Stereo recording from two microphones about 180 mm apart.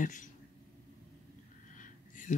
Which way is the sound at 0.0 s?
45° left (ahead or behind).